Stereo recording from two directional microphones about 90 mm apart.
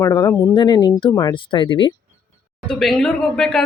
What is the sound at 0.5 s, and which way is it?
Speech, 50° left (ahead or behind).